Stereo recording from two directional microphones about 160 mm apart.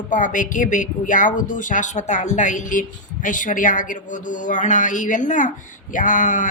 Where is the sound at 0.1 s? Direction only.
55° left (ahead or behind).